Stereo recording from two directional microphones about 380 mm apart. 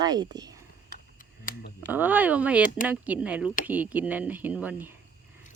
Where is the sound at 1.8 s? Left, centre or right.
Centre.